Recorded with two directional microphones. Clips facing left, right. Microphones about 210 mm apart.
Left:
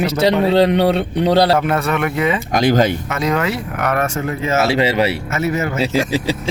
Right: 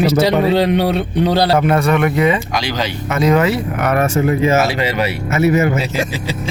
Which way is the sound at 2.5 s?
50° left (ahead or behind).